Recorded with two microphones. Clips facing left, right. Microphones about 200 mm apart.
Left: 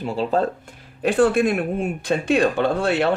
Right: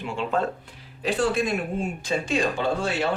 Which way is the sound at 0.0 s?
35° left (ahead or behind).